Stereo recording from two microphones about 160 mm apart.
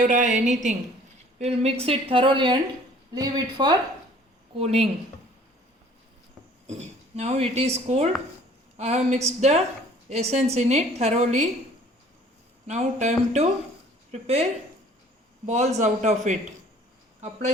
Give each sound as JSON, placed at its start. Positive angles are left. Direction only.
{"t": 0.0, "sound": "a woman's voice", "side_deg": -50}
{"t": 4.5, "sound": "speech", "side_deg": -40}
{"t": 6.7, "sound": "a woman's voice", "side_deg": -40}
{"t": 12.6, "sound": "a woman's voice", "side_deg": -45}
{"t": 15.4, "sound": "a woman's voice", "side_deg": -45}